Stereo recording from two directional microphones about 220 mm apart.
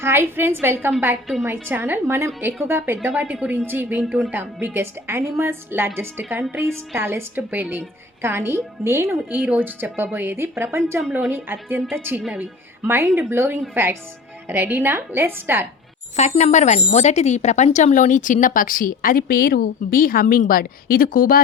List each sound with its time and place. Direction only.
0.0 s a woman's voice: 10° right (ahead or behind)
16.1 s speech: 30° left (ahead or behind)